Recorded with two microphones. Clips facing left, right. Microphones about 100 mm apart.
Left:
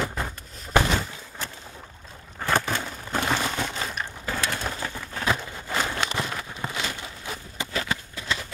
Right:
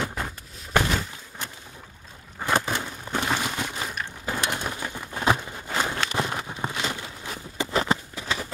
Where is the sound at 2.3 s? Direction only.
15° right (ahead or behind).